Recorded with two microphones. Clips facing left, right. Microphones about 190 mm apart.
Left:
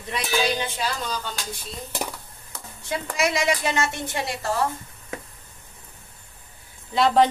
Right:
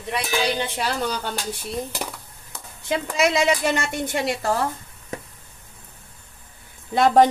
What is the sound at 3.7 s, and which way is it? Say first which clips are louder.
Speech: right 2 dB; 60° right (ahead or behind).